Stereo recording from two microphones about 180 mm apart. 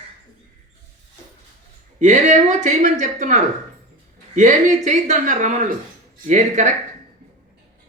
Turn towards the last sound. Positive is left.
turn(degrees=-40)  # may be behind; listen again after turning